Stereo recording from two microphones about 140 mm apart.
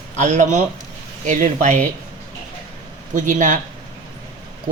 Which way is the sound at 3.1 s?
65° right (ahead or behind).